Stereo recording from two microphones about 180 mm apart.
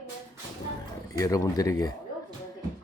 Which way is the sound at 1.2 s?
20° left (ahead or behind).